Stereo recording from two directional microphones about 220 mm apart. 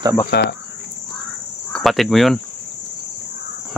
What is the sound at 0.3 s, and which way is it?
Speech, 50° left (ahead or behind).